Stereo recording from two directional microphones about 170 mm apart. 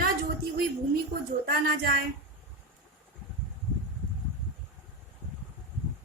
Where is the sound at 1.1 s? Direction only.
60° right (ahead or behind).